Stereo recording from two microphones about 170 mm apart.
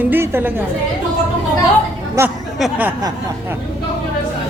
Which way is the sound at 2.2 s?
15° right (ahead or behind).